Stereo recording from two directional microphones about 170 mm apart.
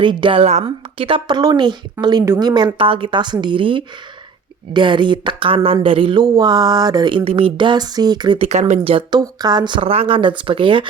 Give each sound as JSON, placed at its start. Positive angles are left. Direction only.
{"t": 0.0, "sound": "speech", "side_deg": -30}
{"t": 8.4, "sound": "speech", "side_deg": -40}